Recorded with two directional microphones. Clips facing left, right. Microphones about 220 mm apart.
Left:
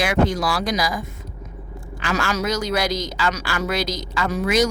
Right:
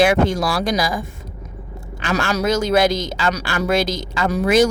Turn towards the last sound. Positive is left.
turn(degrees=-30)  # may be behind; listen again after turning